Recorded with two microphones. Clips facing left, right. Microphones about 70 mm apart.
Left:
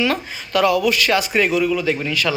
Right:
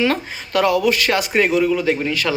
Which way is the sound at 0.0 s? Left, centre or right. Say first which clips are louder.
Right 1 dB; right.